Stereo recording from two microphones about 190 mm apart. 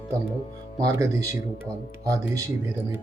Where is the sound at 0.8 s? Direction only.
15° right (ahead or behind).